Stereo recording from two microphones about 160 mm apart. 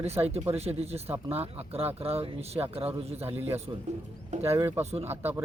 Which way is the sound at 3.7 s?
25° right (ahead or behind).